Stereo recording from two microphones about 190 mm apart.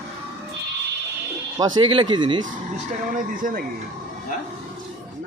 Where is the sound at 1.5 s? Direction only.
20° right (ahead or behind).